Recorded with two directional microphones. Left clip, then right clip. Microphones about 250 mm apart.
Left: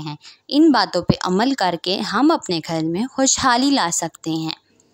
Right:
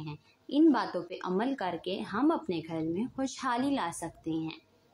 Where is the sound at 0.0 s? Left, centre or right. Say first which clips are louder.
Left 12 dB; left.